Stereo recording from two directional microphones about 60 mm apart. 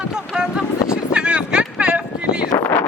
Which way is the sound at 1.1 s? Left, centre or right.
Centre.